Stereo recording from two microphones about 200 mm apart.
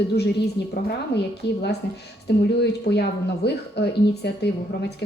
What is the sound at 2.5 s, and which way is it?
Speech, 55° left (ahead or behind).